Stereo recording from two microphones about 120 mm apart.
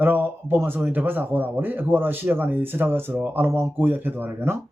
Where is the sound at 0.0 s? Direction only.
15° right (ahead or behind).